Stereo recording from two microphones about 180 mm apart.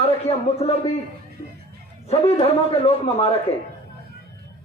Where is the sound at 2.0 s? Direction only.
35° left (ahead or behind).